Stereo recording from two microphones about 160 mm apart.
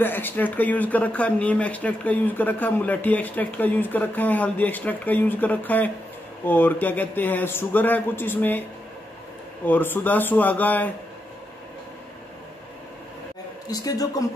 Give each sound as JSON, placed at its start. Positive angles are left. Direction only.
{"t": 0.0, "sound": "speech", "side_deg": 10}
{"t": 9.7, "sound": "speech", "side_deg": 10}
{"t": 13.7, "sound": "speech", "side_deg": 20}